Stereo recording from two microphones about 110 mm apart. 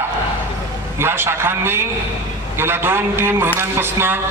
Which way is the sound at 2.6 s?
20° right (ahead or behind).